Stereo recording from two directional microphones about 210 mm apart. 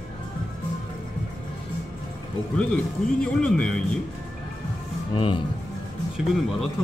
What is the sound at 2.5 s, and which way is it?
Speech, 5° left (ahead or behind).